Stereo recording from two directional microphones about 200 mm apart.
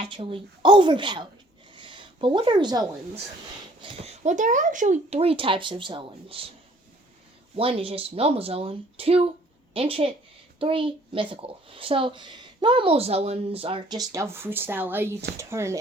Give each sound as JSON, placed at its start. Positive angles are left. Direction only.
{"t": 0.0, "sound": "a child's voice", "side_deg": -25}
{"t": 1.7, "sound": "a sound", "side_deg": -25}
{"t": 3.8, "sound": "a child's voice", "side_deg": -35}
{"t": 7.5, "sound": "a child's voice", "side_deg": -25}